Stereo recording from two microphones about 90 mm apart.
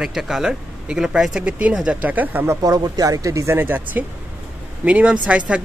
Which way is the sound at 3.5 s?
20° right (ahead or behind).